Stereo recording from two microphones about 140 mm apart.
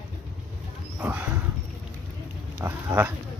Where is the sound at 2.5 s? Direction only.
20° right (ahead or behind).